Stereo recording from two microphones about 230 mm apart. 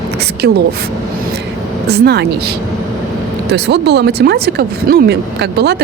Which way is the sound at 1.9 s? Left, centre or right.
Right.